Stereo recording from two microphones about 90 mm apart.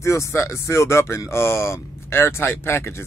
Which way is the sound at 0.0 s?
35° left (ahead or behind).